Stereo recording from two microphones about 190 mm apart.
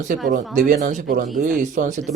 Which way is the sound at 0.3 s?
40° right (ahead or behind).